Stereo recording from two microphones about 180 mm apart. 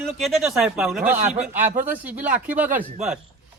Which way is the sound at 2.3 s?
10° right (ahead or behind).